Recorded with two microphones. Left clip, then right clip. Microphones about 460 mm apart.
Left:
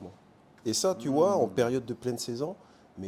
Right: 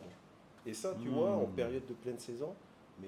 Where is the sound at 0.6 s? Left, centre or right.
Left.